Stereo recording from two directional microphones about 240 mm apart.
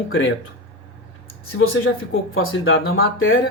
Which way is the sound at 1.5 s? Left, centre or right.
Left.